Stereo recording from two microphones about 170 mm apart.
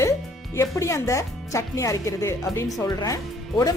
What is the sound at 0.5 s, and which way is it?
Speech, 15° left (ahead or behind).